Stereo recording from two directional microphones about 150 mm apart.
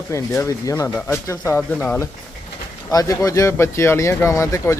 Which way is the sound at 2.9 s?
25° left (ahead or behind).